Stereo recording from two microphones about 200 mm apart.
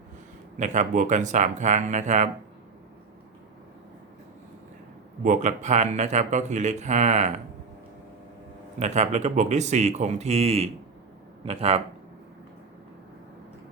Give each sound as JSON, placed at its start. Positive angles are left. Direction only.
{"t": 0.5, "sound": "speech", "side_deg": -40}
{"t": 5.2, "sound": "speech", "side_deg": -40}
{"t": 8.8, "sound": "speech", "side_deg": -35}